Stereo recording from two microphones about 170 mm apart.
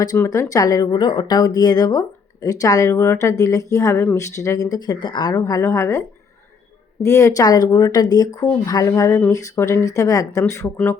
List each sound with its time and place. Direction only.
0.0 s speech: 20° left (ahead or behind)